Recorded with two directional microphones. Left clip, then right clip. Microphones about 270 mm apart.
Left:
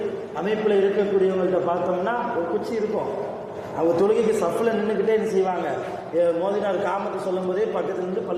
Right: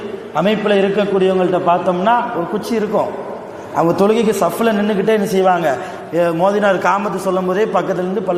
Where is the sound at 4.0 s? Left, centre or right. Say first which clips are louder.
Right 5 dB; right.